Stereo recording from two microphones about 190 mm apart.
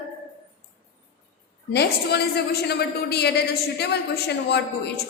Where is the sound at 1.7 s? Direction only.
60° left (ahead or behind).